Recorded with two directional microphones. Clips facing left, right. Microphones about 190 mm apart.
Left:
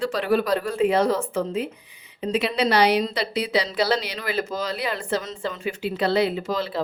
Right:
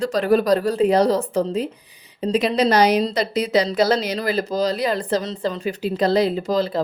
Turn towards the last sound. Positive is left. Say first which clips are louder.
# right 5 dB
turn(degrees=-40)  # may be behind; listen again after turning